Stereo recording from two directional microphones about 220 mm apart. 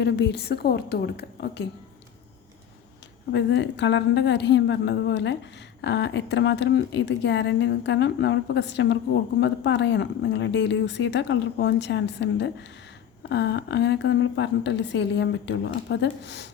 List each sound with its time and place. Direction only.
0.0 s a woman's voice: 50° left (ahead or behind)
3.3 s a woman's voice: 55° left (ahead or behind)